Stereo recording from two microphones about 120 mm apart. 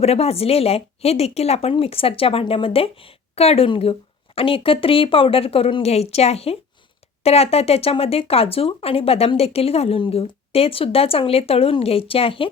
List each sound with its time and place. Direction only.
0.0 s speech: 60° left (ahead or behind)